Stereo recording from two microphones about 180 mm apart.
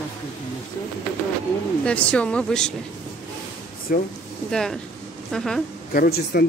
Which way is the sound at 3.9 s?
60° left (ahead or behind).